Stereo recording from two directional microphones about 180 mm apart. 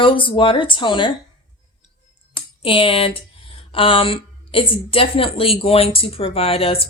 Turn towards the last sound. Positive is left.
turn(degrees=30)  # may be behind; listen again after turning